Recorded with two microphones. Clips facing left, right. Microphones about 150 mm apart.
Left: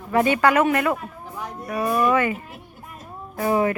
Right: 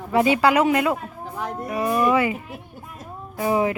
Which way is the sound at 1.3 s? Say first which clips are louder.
Right 5 dB; 65° right (ahead or behind).